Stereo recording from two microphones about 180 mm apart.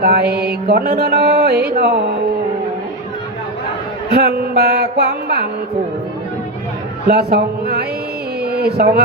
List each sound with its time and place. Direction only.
0.0 s mantra: 65° right (ahead or behind)
4.1 s mantra: 65° right (ahead or behind)
7.1 s mantra: 65° right (ahead or behind)
8.4 s speech: 60° right (ahead or behind)